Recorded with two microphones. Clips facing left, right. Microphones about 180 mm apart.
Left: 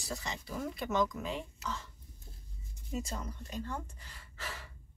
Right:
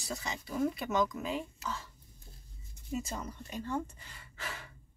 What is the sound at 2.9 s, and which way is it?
Speech, 5° right (ahead or behind).